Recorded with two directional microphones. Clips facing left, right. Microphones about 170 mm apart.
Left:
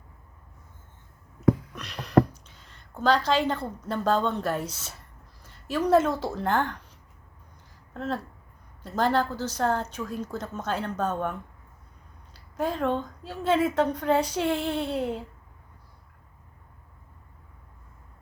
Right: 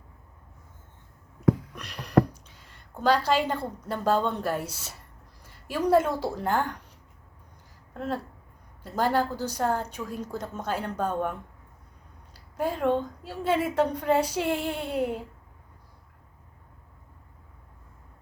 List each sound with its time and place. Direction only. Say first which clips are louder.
1.7 s speech: left 1 dB; 10° right (ahead or behind)
7.9 s a woman's voice: even; 10° right (ahead or behind)